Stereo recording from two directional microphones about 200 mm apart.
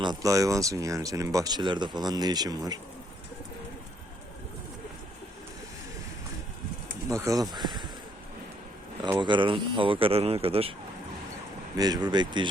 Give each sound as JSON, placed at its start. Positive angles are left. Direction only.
{"t": 0.0, "sound": "speech", "side_deg": -20}
{"t": 7.1, "sound": "speech", "side_deg": -15}
{"t": 9.1, "sound": "speech", "side_deg": -25}
{"t": 11.8, "sound": "speech", "side_deg": -20}